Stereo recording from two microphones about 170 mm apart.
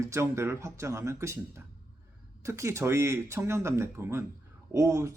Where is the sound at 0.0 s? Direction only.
15° right (ahead or behind).